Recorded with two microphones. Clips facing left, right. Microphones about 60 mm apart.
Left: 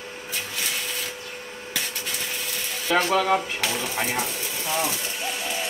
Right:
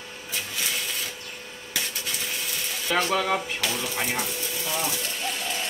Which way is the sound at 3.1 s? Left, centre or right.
Centre.